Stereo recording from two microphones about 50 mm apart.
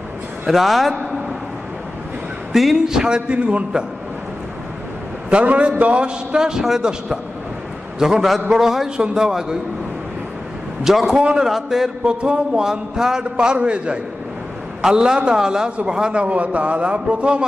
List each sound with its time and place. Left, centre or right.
0.5 s a man's voice: centre
2.5 s a man's voice: centre
5.3 s a man's voice: right
10.8 s a man's voice: centre
12.1 s a man's voice: right